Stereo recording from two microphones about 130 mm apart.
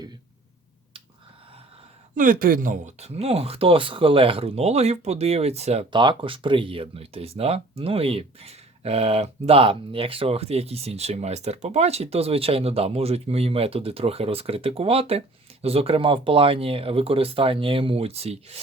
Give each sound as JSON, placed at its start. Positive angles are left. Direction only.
{"t": 2.1, "sound": "speech", "side_deg": -90}
{"t": 3.0, "sound": "speech", "side_deg": -55}
{"t": 5.9, "sound": "speech", "side_deg": -35}